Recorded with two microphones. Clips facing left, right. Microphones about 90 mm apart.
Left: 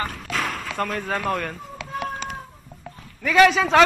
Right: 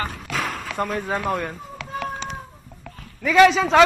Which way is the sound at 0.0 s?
10° right (ahead or behind).